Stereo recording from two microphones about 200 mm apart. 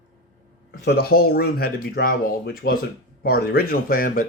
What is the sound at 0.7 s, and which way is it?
Speech, 50° left (ahead or behind).